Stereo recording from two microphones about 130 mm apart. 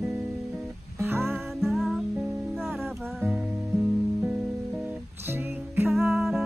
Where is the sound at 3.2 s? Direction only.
5° right (ahead or behind).